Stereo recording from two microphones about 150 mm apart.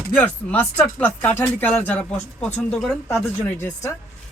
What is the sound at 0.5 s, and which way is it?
Speech, 15° left (ahead or behind).